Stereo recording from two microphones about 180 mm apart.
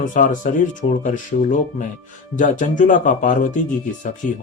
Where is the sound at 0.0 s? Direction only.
45° left (ahead or behind).